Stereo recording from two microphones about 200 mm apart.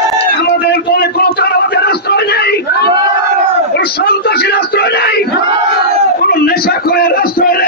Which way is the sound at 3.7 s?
50° left (ahead or behind).